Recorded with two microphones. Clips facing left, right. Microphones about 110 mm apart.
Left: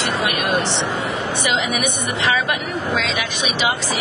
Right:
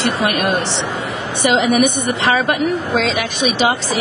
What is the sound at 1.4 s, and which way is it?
A woman's voice, 40° right (ahead or behind).